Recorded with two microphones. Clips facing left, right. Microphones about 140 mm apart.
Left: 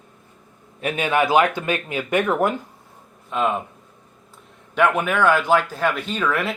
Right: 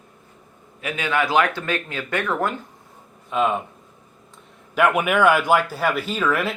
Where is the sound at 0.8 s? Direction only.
25° left (ahead or behind).